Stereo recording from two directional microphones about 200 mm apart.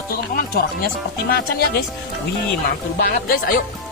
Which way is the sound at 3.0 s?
45° left (ahead or behind).